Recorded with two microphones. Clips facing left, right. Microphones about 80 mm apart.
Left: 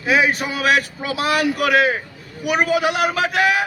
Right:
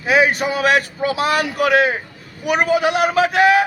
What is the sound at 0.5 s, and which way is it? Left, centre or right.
Speech, right.